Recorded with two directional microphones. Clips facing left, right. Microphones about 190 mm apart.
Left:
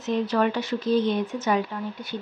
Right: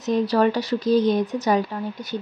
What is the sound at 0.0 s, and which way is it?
Speech, 35° right (ahead or behind).